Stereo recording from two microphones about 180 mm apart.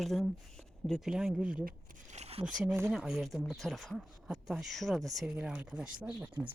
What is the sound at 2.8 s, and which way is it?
Speech, 5° right (ahead or behind).